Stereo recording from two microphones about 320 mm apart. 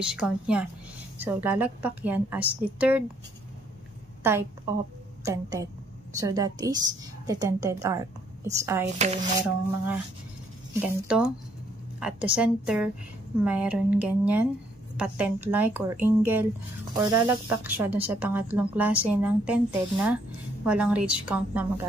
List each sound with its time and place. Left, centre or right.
0.0 s speech: centre
4.2 s a woman's voice: centre
8.9 s speech: right
10.7 s speech: centre